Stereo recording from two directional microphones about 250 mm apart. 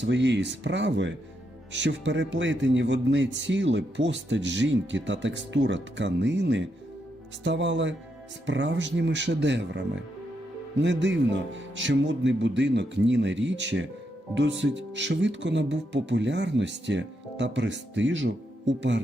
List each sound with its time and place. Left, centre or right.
0.0 s speech: right